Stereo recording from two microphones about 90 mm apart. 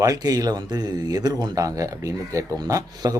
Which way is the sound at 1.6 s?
40° right (ahead or behind).